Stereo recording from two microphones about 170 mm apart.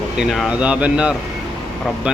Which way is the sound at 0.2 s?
Centre (ahead or behind).